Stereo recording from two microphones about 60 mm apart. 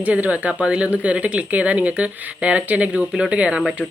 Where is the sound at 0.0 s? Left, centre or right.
Right.